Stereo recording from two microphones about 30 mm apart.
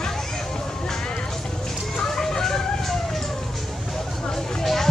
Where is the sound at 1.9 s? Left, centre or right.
Centre.